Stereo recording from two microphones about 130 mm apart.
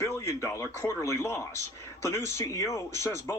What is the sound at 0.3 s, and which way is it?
Speech, 25° left (ahead or behind).